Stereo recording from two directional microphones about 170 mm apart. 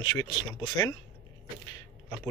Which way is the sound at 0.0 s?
25° left (ahead or behind).